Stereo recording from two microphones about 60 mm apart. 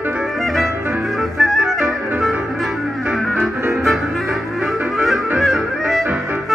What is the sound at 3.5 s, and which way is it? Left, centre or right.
Music, right.